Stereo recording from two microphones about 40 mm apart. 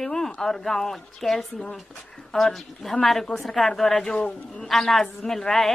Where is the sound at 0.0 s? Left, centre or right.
Centre.